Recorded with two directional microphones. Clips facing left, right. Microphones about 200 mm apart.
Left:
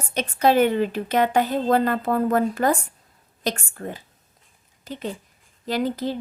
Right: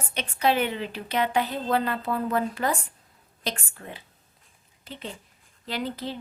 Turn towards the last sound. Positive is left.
turn(degrees=45)  # may be behind; listen again after turning